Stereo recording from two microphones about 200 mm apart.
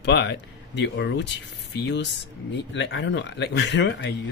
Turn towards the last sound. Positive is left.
turn(degrees=60)  # may be behind; listen again after turning